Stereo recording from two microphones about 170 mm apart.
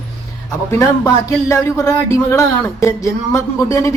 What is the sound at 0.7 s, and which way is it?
Speech, 15° left (ahead or behind).